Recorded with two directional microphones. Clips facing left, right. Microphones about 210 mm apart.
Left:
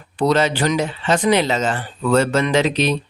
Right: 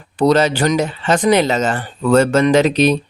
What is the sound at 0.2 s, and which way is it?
Speech, 40° right (ahead or behind).